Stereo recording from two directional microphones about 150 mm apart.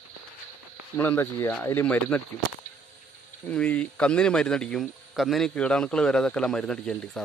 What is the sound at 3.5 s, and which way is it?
Speech, 10° left (ahead or behind).